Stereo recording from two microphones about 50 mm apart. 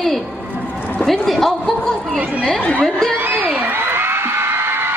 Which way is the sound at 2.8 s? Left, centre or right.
Centre.